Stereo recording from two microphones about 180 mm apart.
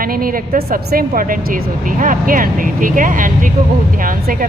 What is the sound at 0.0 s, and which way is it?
A woman's voice, 50° right (ahead or behind).